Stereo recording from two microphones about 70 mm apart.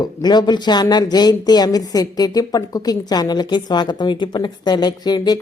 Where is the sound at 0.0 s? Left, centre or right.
Left.